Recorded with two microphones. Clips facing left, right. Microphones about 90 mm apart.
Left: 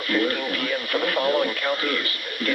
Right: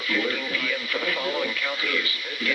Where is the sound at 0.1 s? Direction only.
55° left (ahead or behind).